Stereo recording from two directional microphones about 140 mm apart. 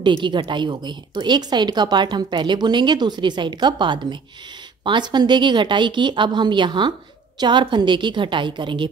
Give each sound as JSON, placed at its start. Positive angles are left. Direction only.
{"t": 0.0, "sound": "a woman's voice", "side_deg": -35}